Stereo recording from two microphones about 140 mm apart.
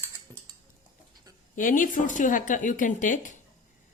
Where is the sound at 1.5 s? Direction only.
70° left (ahead or behind).